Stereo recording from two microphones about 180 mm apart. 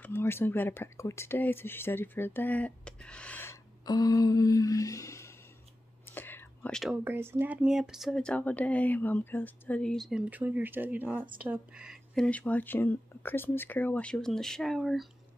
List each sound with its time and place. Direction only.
0.0 s speech: 10° left (ahead or behind)
3.8 s a sound: 20° left (ahead or behind)
6.0 s whispering: 10° left (ahead or behind)
7.1 s speech: 10° right (ahead or behind)